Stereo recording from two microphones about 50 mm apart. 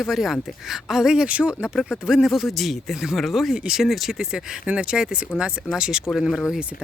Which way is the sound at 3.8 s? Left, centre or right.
Centre.